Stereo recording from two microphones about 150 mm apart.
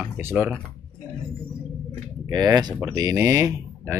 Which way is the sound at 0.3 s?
10° right (ahead or behind).